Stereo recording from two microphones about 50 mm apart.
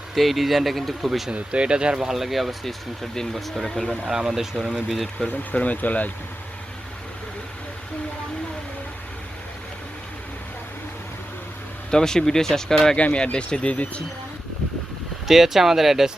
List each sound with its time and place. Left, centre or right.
0.1 s speech: centre
1.3 s speech: right; by 3.9 s centre
4.0 s speech: centre
5.5 s speech: left
11.9 s speech: centre
13.0 s speech: left
15.3 s speech: centre